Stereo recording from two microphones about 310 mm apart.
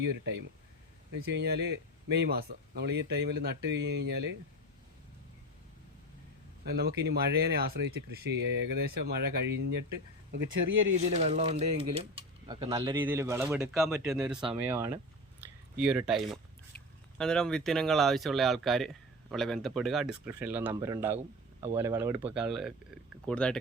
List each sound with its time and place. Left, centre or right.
0.0 s speech: right
6.7 s speech: right
10.9 s speech: right; by 23.6 s centre